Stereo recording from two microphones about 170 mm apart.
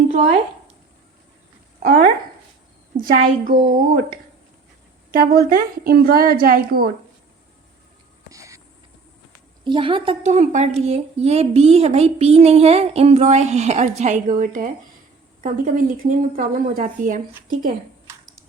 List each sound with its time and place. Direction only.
1.8 s speech: 45° right (ahead or behind)
5.1 s a woman's voice: 60° right (ahead or behind)
8.3 s a sound: 20° right (ahead or behind)
9.6 s speech: 30° right (ahead or behind); by 17.7 s 55° right (ahead or behind)